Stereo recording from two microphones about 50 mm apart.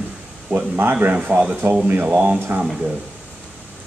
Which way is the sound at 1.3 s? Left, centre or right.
Right.